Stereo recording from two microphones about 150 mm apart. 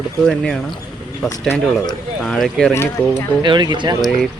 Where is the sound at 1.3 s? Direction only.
15° left (ahead or behind).